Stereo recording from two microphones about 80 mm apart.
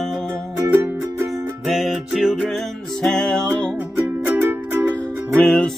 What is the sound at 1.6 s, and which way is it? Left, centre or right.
Music, centre.